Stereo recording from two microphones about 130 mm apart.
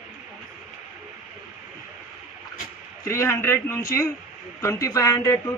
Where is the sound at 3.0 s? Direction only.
20° left (ahead or behind).